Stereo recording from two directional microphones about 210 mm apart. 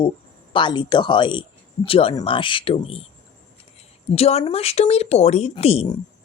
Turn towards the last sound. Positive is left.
turn(degrees=30)  # may be behind; listen again after turning